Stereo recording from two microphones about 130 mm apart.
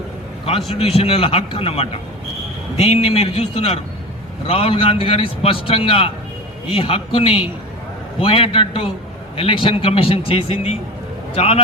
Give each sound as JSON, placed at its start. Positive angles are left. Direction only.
{"t": 0.7, "sound": "a man's voice", "side_deg": 50}